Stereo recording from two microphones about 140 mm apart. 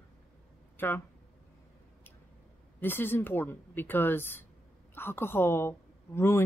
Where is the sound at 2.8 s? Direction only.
15° left (ahead or behind).